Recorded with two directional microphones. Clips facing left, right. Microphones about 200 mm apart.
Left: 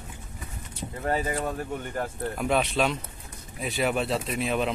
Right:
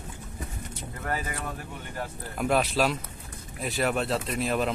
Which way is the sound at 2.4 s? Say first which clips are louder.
Right 1 dB; centre (ahead or behind).